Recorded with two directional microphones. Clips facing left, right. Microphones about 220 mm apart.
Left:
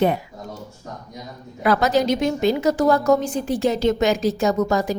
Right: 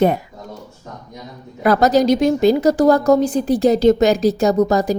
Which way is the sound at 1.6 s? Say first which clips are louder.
Right 5 dB; 40° right (ahead or behind).